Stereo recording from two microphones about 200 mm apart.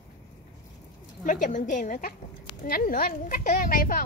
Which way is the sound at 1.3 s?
40° left (ahead or behind).